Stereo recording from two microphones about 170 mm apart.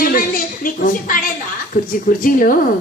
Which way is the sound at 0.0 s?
55° left (ahead or behind).